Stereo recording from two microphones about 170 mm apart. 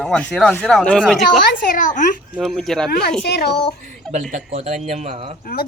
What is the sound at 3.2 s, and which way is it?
Speech, 75° left (ahead or behind).